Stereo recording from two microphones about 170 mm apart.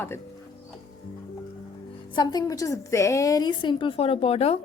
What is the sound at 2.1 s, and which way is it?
A woman's voice, 25° left (ahead or behind).